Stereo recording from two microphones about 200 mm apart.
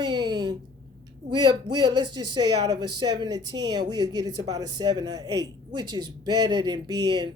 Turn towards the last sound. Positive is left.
turn(degrees=-20)  # may be behind; listen again after turning